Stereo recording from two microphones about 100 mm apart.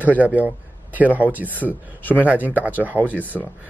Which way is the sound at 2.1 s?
15° right (ahead or behind).